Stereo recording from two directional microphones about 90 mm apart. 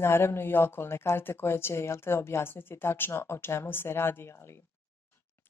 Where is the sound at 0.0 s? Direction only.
25° left (ahead or behind).